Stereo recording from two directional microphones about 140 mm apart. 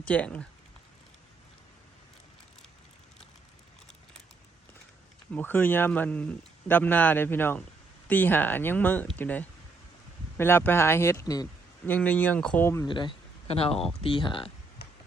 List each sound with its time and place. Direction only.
0.0 s speech: 10° left (ahead or behind)
5.3 s speech: 15° left (ahead or behind)
11.9 s speech: 10° left (ahead or behind)
12.9 s speech: 35° left (ahead or behind)